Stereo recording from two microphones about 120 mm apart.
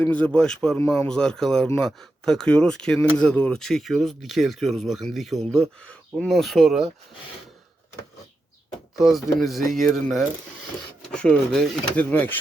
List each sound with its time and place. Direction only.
0.0 s speech: 10° left (ahead or behind)
9.0 s speech: centre (ahead or behind)
12.1 s speech: 15° left (ahead or behind)